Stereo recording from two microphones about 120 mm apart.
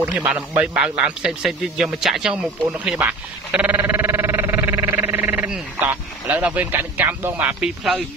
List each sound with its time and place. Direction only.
0.0 s speech: 10° right (ahead or behind)